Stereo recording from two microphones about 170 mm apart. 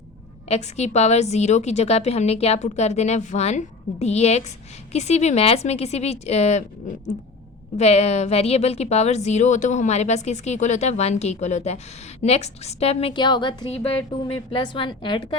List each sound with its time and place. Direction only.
0.4 s a woman's voice: 40° left (ahead or behind)
7.8 s a woman's voice: 40° left (ahead or behind)